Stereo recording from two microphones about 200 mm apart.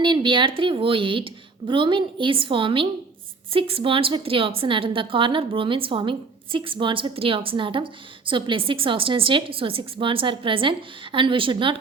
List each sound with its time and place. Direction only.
0.0 s a woman's voice: 25° right (ahead or behind)